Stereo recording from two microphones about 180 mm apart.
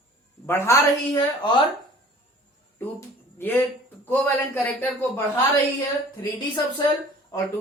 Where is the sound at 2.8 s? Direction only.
10° left (ahead or behind).